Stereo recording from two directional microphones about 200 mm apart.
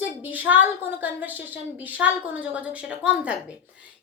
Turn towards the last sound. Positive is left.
turn(degrees=-5)  # may be behind; listen again after turning